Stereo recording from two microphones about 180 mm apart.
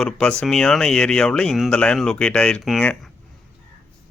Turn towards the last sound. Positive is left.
turn(degrees=5)  # may be behind; listen again after turning